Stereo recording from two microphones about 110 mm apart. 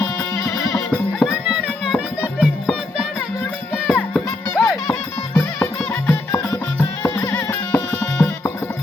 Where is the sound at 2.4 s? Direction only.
5° left (ahead or behind).